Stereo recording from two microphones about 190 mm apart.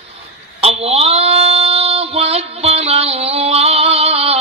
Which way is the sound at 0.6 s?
30° right (ahead or behind).